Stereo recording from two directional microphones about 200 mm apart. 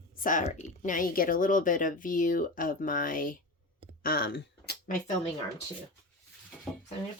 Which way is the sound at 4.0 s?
45° left (ahead or behind).